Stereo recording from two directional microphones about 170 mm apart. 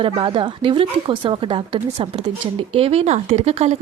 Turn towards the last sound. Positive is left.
turn(degrees=-40)  # may be behind; listen again after turning